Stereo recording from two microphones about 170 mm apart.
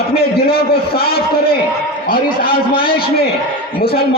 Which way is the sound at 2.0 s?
60° left (ahead or behind).